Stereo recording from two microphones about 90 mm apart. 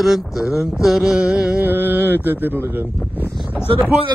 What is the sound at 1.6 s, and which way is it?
Speech, 20° right (ahead or behind).